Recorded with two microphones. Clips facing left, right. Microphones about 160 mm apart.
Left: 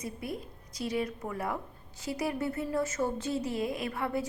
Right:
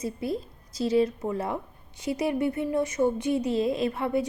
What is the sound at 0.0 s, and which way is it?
Speech, 30° right (ahead or behind).